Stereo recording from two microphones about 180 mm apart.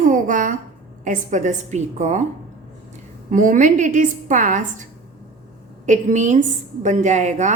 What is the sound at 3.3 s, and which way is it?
A woman's voice, 45° right (ahead or behind).